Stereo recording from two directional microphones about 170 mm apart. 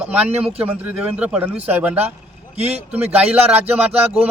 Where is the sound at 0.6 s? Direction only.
10° right (ahead or behind).